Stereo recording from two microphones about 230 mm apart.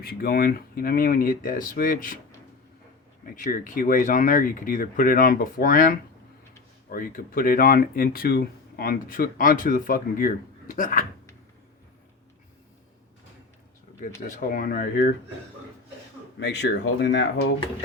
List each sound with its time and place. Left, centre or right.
0.0 s speech: left
3.2 s speech: left
14.3 s speech: left
16.4 s speech: left